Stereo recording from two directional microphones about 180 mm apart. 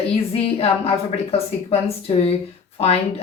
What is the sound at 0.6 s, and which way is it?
A woman's voice, 35° left (ahead or behind).